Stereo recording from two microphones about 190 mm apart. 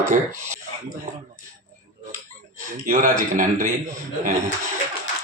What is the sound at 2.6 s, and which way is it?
A man's voice, 45° right (ahead or behind).